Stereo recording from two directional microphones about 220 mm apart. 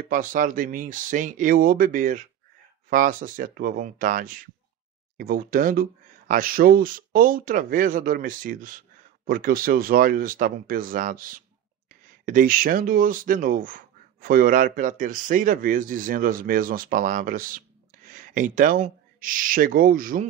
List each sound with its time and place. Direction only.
0.1 s speech: 35° right (ahead or behind)